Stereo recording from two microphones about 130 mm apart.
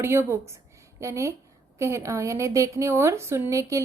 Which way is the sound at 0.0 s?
20° right (ahead or behind).